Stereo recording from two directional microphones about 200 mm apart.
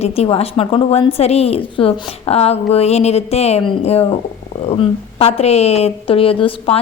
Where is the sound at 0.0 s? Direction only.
30° left (ahead or behind).